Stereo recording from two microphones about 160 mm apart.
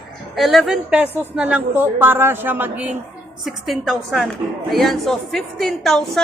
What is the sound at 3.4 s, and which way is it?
A woman's voice, centre (ahead or behind).